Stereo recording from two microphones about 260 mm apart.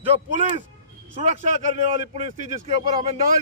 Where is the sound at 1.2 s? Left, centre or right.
Right.